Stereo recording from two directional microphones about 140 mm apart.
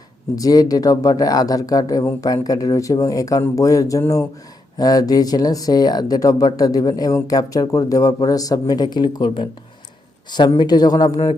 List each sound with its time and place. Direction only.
0.3 s speech: 25° left (ahead or behind)
10.6 s speech: 30° left (ahead or behind)